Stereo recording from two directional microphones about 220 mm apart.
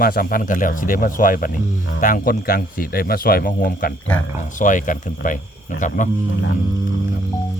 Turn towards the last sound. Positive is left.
turn(degrees=35)  # may be behind; listen again after turning